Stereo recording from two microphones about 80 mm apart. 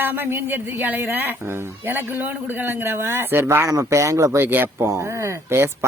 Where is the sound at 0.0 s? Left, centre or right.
Right.